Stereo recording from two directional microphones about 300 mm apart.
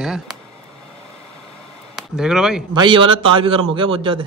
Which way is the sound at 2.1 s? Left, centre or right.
Centre.